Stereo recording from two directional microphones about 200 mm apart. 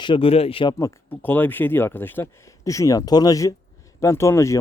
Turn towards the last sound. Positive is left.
turn(degrees=15)  # may be behind; listen again after turning